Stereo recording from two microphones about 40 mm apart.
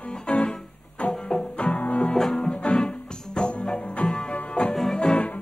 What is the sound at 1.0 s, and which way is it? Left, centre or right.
Music, left.